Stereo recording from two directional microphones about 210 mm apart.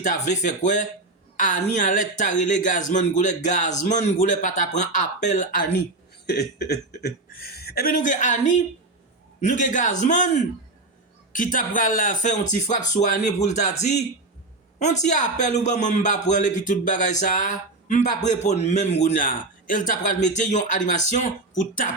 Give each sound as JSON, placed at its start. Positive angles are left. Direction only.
{"t": 0.0, "sound": "a man's voice", "side_deg": 35}
{"t": 6.2, "sound": "a man's voice", "side_deg": 50}